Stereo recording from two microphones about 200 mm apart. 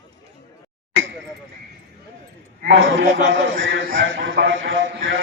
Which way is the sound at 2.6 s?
65° right (ahead or behind).